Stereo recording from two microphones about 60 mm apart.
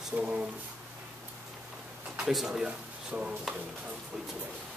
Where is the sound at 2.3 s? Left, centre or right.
Centre.